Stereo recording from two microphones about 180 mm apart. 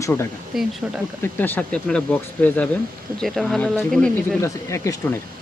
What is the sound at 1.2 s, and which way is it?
Speech, 10° left (ahead or behind).